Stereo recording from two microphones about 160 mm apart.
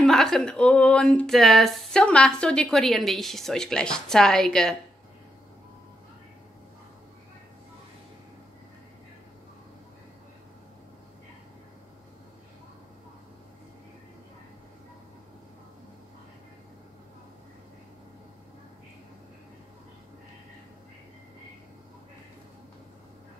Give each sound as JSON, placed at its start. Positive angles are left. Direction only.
{"t": 0.0, "sound": "speech", "side_deg": 5}